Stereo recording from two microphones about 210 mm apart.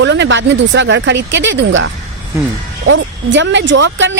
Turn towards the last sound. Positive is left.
turn(degrees=-60)  # may be behind; listen again after turning